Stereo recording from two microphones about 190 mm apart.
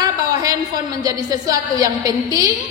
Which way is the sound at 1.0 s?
20° right (ahead or behind).